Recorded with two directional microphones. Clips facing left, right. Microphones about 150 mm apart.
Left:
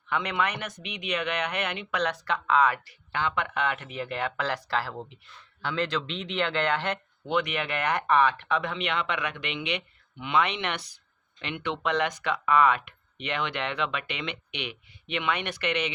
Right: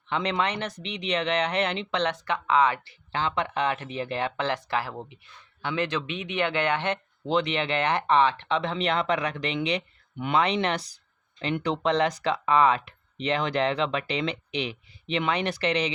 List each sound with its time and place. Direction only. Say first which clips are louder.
0.1 s speech: right 2 dB; 30° right (ahead or behind)